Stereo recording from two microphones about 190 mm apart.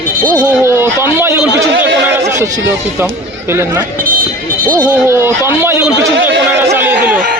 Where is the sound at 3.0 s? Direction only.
10° right (ahead or behind).